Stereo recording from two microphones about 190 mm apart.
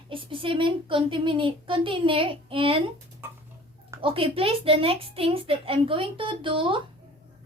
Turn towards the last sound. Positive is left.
turn(degrees=-25)  # may be behind; listen again after turning